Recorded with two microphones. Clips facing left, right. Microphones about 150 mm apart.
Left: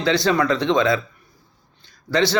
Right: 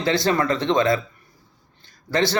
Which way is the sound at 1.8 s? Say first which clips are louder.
Left 2 dB; 50° right (ahead or behind).